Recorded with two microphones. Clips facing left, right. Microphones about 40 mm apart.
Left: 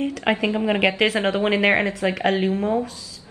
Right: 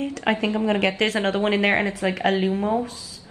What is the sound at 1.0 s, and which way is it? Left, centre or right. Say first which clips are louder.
Speech: left 2 dB; centre.